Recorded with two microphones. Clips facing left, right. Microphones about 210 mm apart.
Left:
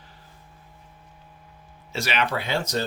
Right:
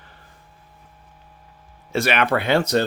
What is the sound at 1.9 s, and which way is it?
Speech, 55° right (ahead or behind).